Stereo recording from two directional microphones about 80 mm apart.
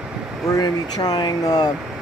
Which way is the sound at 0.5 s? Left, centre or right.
Left.